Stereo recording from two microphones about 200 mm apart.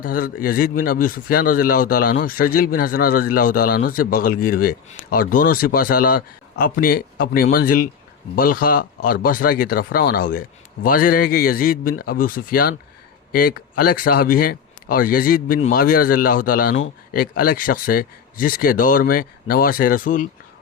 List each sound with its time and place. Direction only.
0.0 s speech: 45° left (ahead or behind)